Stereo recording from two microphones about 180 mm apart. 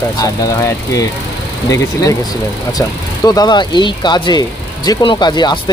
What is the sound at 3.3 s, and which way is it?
Speech, 20° left (ahead or behind).